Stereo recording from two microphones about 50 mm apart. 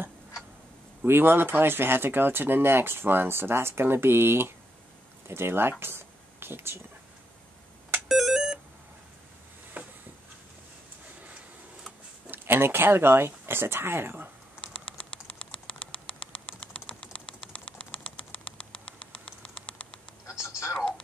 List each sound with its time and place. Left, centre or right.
1.0 s speech: right
8.1 s beep: centre
9.8 s a sound: right
12.3 s speech: right
14.6 s typing: left
20.4 s a sound: left